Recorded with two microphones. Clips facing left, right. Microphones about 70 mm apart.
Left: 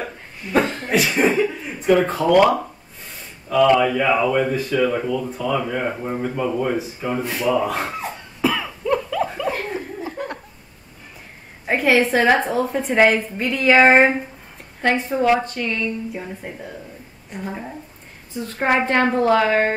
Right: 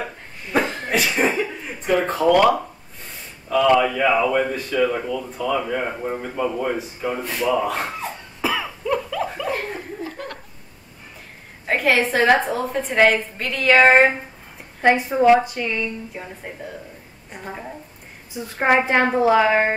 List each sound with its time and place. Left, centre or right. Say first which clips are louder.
0.5 s a sound: left 2 dB; centre
3.4 s speech: left 1 dB; centre
8.4 s cough: left 2 dB; centre
10.0 s laughter: left 3 dB; centre
11.6 s speech: left 2 dB; centre
14.8 s a woman's voice: right 3 dB; centre
16.1 s a woman's voice: left 3 dB; centre